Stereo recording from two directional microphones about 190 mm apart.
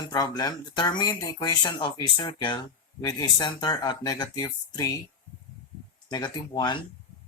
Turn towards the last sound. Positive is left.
turn(degrees=20)  # may be behind; listen again after turning